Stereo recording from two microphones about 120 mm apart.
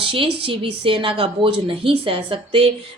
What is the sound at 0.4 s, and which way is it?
A woman's voice, 50° right (ahead or behind).